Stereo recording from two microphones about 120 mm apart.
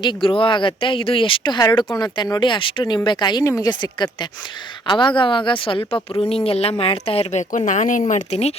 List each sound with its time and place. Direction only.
0.0 s a woman's voice: 45° left (ahead or behind); by 8.5 s 65° left (ahead or behind)